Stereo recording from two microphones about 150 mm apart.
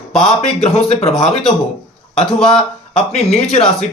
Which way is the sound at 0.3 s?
45° left (ahead or behind).